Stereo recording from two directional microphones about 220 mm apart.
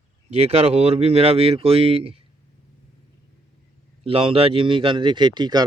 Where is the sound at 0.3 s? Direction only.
30° right (ahead or behind).